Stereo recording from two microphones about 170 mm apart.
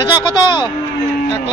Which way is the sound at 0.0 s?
25° left (ahead or behind).